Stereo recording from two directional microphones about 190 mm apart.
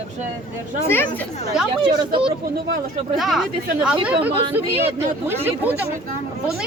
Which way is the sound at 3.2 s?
Centre (ahead or behind).